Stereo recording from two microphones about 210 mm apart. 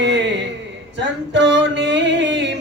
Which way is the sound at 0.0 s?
55° right (ahead or behind).